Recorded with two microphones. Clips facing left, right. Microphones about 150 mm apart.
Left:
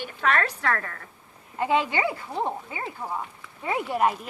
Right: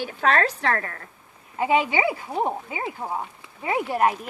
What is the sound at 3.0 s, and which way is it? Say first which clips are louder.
Speech: right 1 dB; 25° right (ahead or behind).